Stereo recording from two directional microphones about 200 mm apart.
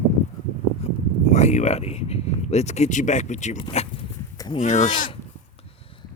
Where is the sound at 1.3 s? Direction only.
35° left (ahead or behind).